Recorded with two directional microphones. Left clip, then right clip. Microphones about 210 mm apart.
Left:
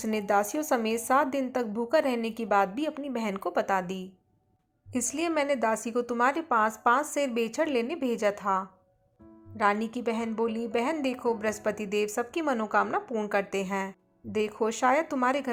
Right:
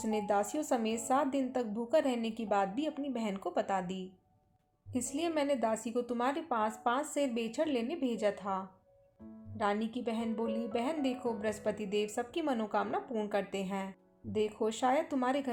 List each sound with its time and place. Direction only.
0.0 s a woman's voice: 15° left (ahead or behind)